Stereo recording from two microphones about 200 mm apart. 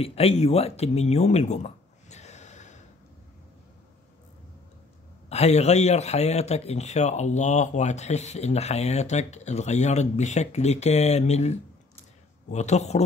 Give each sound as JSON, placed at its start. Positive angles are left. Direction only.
{"t": 0.0, "sound": "speech", "side_deg": 30}
{"t": 5.3, "sound": "speech", "side_deg": 35}